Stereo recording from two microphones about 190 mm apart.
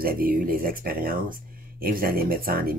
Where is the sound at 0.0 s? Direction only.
50° right (ahead or behind).